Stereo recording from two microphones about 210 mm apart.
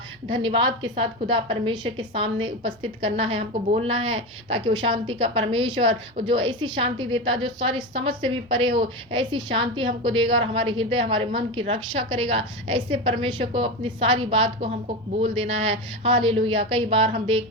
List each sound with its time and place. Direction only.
0.4 s a woman's voice: 25° right (ahead or behind)